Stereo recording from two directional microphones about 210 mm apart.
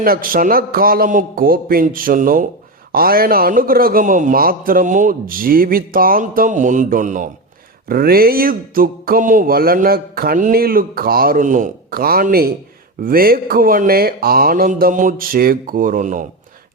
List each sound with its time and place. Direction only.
0.0 s speech: 45° right (ahead or behind)